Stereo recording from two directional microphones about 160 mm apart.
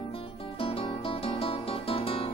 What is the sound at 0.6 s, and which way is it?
Music, 35° left (ahead or behind).